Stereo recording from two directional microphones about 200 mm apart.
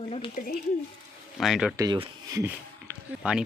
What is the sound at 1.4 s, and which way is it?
Speech, centre (ahead or behind).